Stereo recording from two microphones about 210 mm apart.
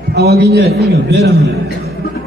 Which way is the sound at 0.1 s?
50° right (ahead or behind).